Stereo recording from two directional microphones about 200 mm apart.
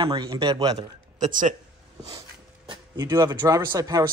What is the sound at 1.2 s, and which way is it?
Speech, 40° right (ahead or behind).